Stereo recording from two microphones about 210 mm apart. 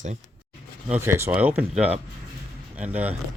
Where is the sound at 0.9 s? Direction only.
10° right (ahead or behind).